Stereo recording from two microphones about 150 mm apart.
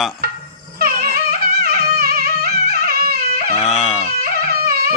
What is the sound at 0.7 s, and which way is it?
Music, 85° right.